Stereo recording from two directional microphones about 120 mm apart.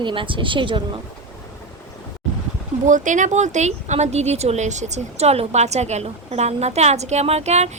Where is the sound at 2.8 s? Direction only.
90° right.